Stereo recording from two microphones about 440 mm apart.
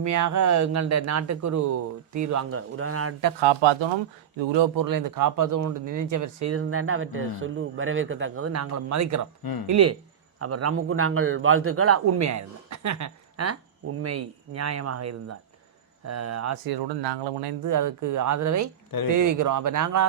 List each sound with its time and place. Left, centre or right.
0.0 s a man's voice: right
3.4 s speech: right
9.4 s speech: left
9.6 s a man's voice: right
16.6 s speech: right
17.6 s a man's voice: right